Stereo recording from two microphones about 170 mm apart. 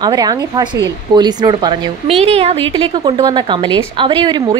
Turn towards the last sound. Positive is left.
turn(degrees=-25)  # may be behind; listen again after turning